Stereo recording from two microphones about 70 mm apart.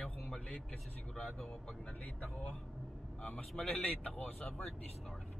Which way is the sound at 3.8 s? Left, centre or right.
Left.